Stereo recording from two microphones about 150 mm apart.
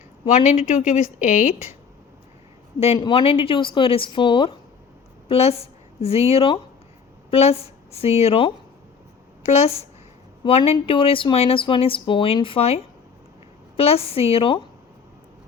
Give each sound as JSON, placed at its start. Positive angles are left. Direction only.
{"t": 0.3, "sound": "speech", "side_deg": 50}
{"t": 3.0, "sound": "a woman's voice", "side_deg": 35}